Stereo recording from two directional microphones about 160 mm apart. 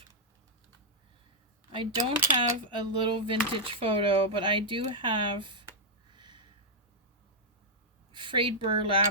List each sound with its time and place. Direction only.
1.7 s speech: 30° right (ahead or behind)
6.1 s a sound: 30° right (ahead or behind)
8.1 s speech: 30° right (ahead or behind)